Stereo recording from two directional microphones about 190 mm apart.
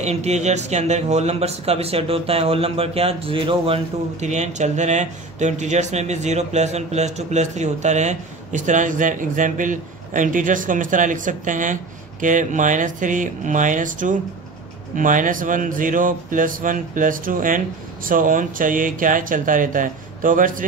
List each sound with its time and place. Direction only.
0.0 s speech: 35° right (ahead or behind)